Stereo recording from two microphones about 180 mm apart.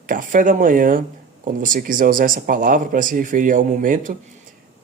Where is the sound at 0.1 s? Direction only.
45° right (ahead or behind).